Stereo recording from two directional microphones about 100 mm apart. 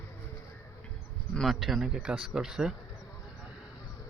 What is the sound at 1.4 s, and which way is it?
Speech, centre (ahead or behind).